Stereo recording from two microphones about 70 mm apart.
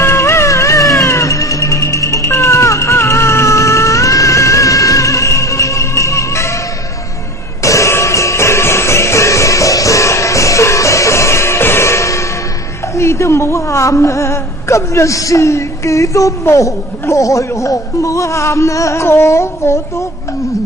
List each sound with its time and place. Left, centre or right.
0.0 s music: left
7.6 s music: left
12.9 s a woman's voice: left